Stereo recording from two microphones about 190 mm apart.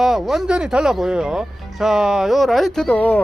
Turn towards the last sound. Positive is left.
turn(degrees=5)  # may be behind; listen again after turning